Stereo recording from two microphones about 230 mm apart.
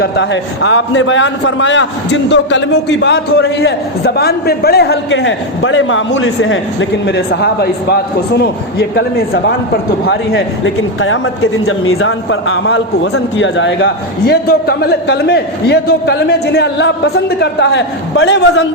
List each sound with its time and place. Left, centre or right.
0.0 s a man's voice: left
7.3 s a man's voice: left
10.1 s a man's voice: left